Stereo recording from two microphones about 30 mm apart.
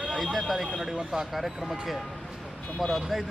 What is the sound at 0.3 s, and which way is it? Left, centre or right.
A man's voice, centre.